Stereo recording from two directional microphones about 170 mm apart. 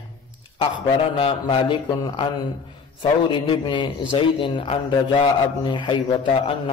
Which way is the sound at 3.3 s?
30° left (ahead or behind).